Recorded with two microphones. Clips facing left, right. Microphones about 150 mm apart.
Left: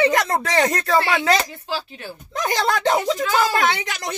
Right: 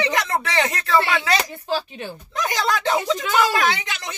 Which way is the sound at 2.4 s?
35° left (ahead or behind).